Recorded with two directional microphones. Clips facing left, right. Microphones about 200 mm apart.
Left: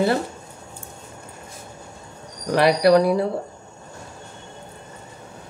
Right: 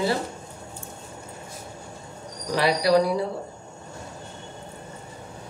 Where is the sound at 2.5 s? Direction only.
60° left (ahead or behind).